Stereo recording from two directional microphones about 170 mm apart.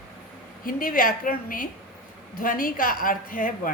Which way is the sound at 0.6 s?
55° left (ahead or behind).